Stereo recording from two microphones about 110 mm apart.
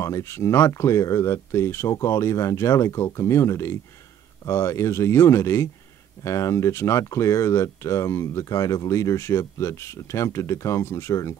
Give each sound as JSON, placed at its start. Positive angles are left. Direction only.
{"t": 0.0, "sound": "speech", "side_deg": 25}